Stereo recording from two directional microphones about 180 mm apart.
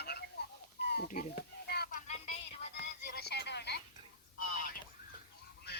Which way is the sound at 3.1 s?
60° left (ahead or behind).